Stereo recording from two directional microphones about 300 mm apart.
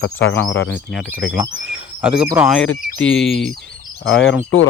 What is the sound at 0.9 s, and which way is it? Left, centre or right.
Speech, centre.